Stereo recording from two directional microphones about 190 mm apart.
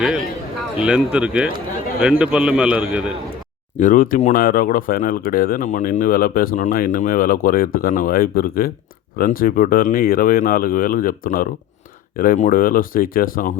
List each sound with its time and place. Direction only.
0.8 s a man's voice: 5° right (ahead or behind)
3.8 s speech: 45° left (ahead or behind)